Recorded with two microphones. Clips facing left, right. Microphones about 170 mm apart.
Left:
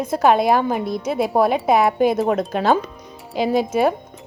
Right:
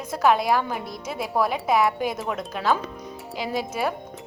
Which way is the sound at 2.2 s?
40° left (ahead or behind).